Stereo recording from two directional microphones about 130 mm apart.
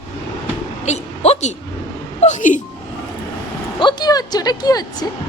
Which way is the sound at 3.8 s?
35° left (ahead or behind).